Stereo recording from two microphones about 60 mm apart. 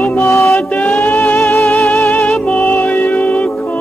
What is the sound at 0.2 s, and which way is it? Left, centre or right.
Music, left.